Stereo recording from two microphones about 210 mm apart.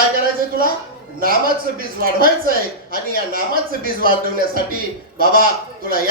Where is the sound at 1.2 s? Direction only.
45° right (ahead or behind).